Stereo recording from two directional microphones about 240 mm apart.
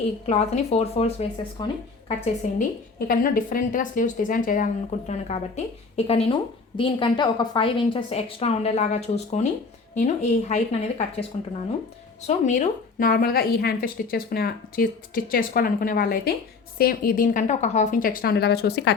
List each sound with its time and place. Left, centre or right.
0.3 s a woman's voice: left
2.4 s a woman's voice: left